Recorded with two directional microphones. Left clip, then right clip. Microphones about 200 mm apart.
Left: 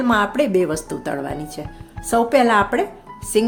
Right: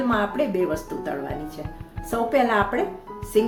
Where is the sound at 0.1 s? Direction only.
50° left (ahead or behind).